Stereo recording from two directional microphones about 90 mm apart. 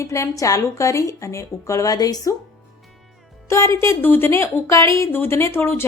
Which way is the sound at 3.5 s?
35° left (ahead or behind).